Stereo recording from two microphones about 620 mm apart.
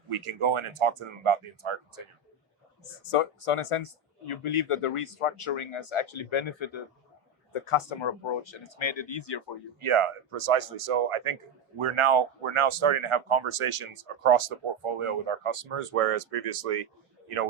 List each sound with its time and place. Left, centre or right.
0.1 s speech: right
2.8 s speech: left
9.8 s speech: right